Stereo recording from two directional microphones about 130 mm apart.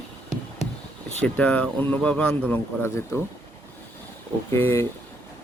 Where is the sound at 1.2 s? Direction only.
10° left (ahead or behind).